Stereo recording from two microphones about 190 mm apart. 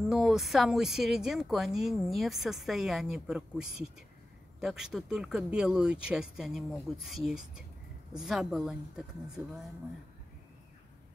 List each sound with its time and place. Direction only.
0.1 s speech: centre (ahead or behind)